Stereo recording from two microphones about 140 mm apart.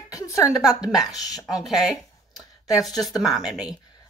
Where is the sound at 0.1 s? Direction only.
20° left (ahead or behind).